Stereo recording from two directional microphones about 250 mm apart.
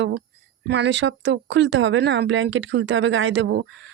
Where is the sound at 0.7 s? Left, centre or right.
Right.